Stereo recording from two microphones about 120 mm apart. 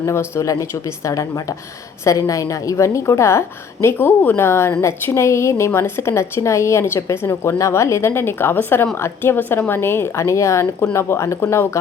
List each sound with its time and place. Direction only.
0.0 s a woman's voice: 25° left (ahead or behind)